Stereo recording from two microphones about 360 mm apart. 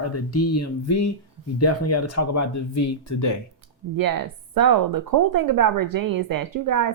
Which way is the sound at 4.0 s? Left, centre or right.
Right.